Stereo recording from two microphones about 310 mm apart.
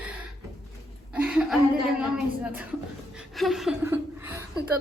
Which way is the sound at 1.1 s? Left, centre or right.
Centre.